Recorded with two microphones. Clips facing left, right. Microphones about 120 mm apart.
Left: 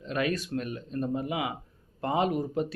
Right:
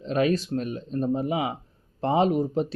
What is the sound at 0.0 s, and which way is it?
Speech, 30° right (ahead or behind).